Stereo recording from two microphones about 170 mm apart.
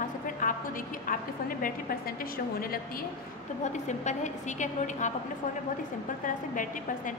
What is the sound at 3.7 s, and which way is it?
A woman's voice, 45° left (ahead or behind).